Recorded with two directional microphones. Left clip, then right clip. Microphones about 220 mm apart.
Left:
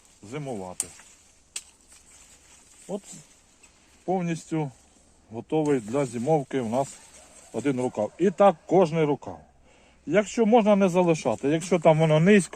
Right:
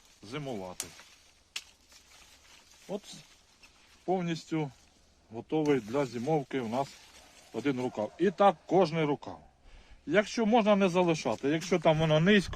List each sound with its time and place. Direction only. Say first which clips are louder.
0.3 s speech: left 4 dB; 30° left (ahead or behind)
1.5 s a sound: left 1 dB; centre (ahead or behind)
4.0 s speech: left 4 dB; 35° left (ahead or behind)